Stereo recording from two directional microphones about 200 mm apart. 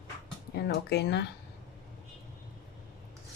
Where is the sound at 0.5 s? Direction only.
55° left (ahead or behind).